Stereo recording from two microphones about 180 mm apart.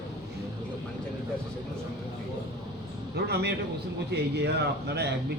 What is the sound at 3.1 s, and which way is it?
A man's voice, 65° right (ahead or behind).